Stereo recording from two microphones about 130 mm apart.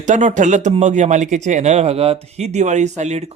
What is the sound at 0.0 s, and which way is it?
Speech, 70° right (ahead or behind).